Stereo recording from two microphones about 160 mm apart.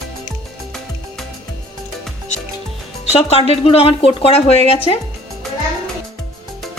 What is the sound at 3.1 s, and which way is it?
Speech, 40° left (ahead or behind).